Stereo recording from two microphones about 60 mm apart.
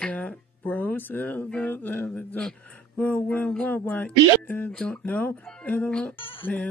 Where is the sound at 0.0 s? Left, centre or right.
Left.